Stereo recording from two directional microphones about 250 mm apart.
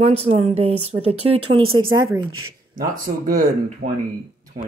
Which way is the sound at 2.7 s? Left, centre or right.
Right.